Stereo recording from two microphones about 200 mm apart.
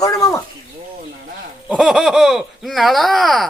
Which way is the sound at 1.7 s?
5° right (ahead or behind).